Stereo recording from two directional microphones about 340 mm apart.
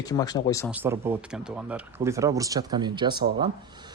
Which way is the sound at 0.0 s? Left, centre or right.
Centre.